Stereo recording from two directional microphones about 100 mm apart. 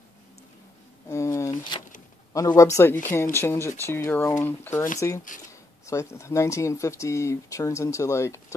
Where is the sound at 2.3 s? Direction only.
35° left (ahead or behind).